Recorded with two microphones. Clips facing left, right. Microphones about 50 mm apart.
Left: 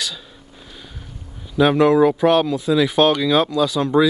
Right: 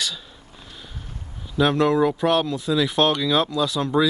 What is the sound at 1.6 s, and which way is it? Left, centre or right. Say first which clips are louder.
Speech: left 5 dB; centre.